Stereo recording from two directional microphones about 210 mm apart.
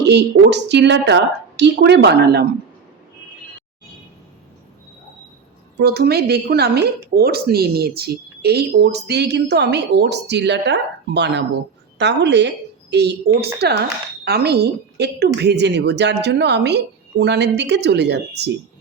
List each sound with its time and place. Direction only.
0.0 s speech: 55° right (ahead or behind)
5.7 s speech: 50° right (ahead or behind)